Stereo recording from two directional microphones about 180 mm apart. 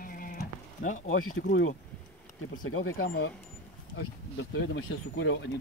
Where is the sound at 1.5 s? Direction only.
90° left.